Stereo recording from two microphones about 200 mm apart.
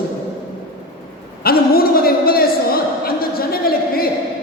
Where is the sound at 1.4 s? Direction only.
50° left (ahead or behind).